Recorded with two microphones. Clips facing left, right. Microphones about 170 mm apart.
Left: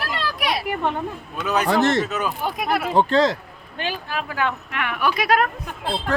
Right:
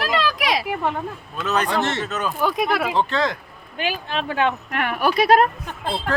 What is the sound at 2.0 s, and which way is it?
Speech, 10° left (ahead or behind).